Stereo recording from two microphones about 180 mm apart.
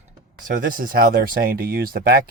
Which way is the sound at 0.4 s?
50° right (ahead or behind).